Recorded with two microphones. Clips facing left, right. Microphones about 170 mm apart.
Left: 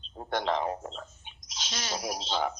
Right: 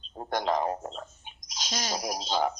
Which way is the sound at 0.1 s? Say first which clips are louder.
Right 3 dB; 40° right (ahead or behind).